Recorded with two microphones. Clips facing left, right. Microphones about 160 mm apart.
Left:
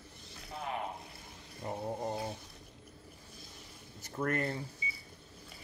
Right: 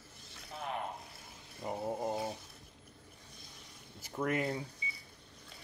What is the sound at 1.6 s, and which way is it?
Speech, 5° right (ahead or behind).